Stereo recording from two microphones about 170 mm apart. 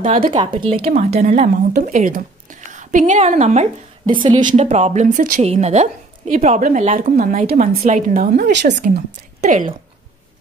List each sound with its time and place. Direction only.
0.0 s speech: 45° right (ahead or behind)
0.3 s a woman's voice: 30° right (ahead or behind)
1.9 s a woman's voice: 50° right (ahead or behind); by 4.5 s 25° right (ahead or behind)
4.5 s speech: 45° right (ahead or behind)
8.4 s a woman's voice: 90° right
9.4 s a woman's voice: 50° right (ahead or behind)